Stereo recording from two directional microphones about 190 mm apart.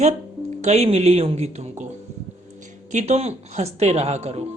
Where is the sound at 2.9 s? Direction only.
35° right (ahead or behind).